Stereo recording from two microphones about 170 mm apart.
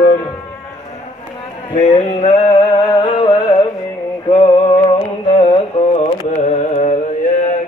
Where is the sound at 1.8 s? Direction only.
45° left (ahead or behind).